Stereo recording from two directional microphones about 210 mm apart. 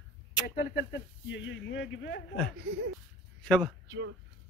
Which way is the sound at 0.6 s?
55° left (ahead or behind).